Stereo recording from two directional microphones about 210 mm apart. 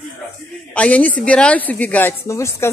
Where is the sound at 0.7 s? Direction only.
5° left (ahead or behind).